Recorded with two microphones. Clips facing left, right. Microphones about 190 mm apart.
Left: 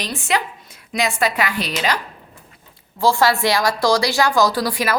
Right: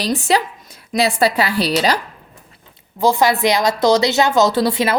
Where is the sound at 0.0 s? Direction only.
35° right (ahead or behind).